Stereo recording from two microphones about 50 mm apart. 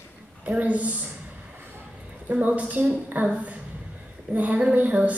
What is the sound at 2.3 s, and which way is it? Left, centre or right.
Speech, right.